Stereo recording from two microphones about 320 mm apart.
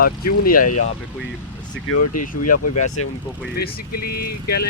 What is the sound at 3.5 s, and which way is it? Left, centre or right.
Speech, left.